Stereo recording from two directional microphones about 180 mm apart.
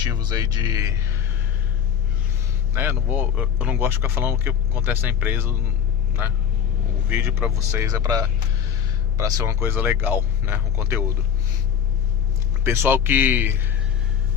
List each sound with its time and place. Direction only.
0.2 s speech: 20° right (ahead or behind)
2.7 s speech: 10° right (ahead or behind)
7.1 s speech: 10° right (ahead or behind)
12.6 s speech: 15° right (ahead or behind)